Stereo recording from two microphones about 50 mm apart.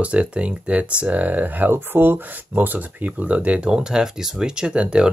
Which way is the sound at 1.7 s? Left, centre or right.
Right.